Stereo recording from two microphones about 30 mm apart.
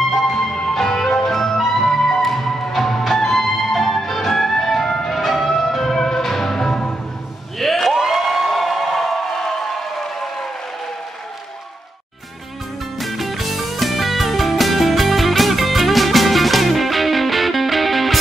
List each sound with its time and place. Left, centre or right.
0.1 s music: centre
7.5 s a sound: centre
13.0 s music: centre